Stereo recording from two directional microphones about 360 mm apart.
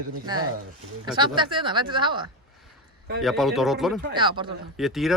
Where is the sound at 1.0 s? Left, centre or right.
Centre.